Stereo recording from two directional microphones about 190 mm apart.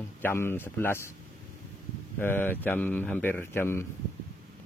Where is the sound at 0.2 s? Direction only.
10° left (ahead or behind).